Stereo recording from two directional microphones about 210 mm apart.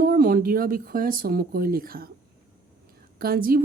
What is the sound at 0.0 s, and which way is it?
A woman's voice, 45° right (ahead or behind).